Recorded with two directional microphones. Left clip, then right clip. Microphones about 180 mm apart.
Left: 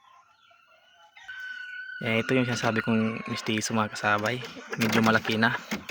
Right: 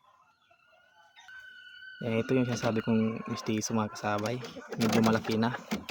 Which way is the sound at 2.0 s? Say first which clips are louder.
Left 4 dB; 5° right (ahead or behind).